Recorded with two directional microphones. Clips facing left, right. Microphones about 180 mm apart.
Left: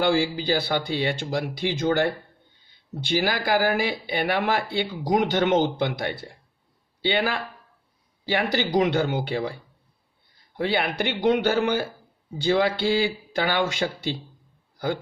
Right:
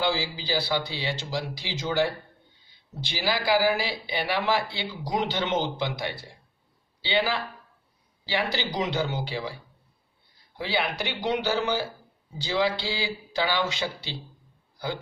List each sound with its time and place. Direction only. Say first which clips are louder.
0.0 s speech: left 6 dB; 50° left (ahead or behind)
10.6 s speech: left 4 dB; 55° left (ahead or behind)